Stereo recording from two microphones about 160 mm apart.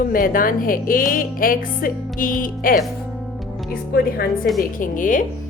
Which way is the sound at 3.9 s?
70° left (ahead or behind).